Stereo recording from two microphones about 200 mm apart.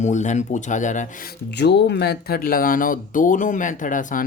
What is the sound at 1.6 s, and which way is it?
Speech, 55° left (ahead or behind).